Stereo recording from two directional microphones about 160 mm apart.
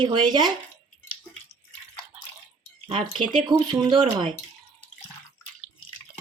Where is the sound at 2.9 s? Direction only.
35° right (ahead or behind).